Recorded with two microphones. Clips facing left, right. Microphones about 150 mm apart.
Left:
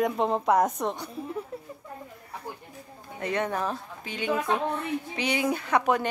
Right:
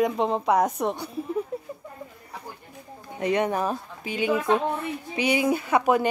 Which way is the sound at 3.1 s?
15° right (ahead or behind).